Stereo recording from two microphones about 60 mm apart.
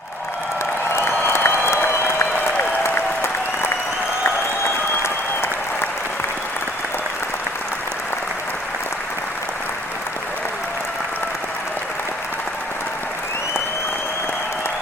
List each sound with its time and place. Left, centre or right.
0.9 s applause: left
5.0 s applause: left